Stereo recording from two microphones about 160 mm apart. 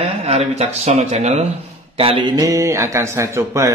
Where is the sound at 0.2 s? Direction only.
40° right (ahead or behind).